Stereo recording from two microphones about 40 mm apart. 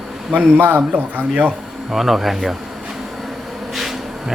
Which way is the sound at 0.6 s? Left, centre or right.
Right.